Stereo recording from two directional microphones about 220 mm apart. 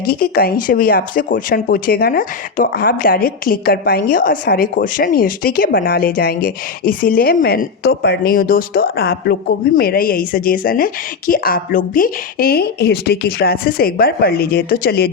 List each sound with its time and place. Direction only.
0.1 s speech: 40° left (ahead or behind)